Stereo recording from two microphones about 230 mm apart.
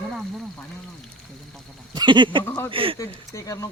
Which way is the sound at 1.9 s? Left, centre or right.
Centre.